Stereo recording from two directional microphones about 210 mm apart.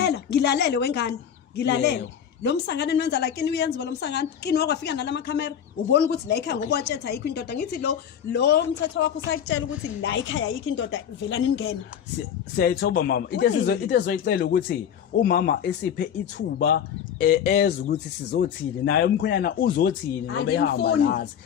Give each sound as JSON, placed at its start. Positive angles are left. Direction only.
{"t": 0.0, "sound": "a woman's voice", "side_deg": 50}
{"t": 13.0, "sound": "a woman's voice", "side_deg": 55}
{"t": 19.7, "sound": "a woman's voice", "side_deg": 65}